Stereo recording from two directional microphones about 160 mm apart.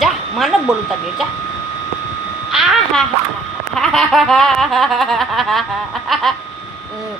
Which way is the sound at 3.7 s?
Centre (ahead or behind).